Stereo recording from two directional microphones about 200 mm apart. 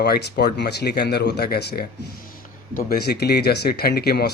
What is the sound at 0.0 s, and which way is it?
Speech, 50° left (ahead or behind).